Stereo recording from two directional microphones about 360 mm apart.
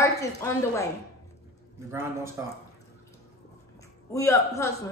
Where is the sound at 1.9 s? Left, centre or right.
Centre.